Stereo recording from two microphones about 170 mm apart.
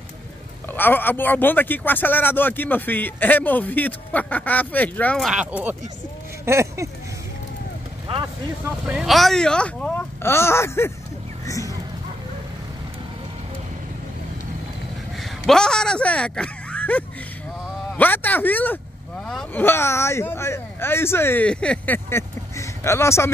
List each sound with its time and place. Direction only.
0.7 s speech: 10° left (ahead or behind); by 5.8 s 10° right (ahead or behind)
6.4 s a sound: 15° right (ahead or behind)
8.6 s speech: 5° right (ahead or behind); by 11.7 s 20° left (ahead or behind)
15.4 s speech: 5° left (ahead or behind)
19.6 s speech: 15° left (ahead or behind)